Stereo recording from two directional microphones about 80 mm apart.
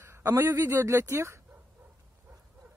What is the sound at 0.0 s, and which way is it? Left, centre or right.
Speech, right.